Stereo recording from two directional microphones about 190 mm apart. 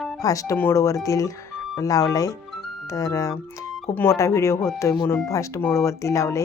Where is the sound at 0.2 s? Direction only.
15° left (ahead or behind).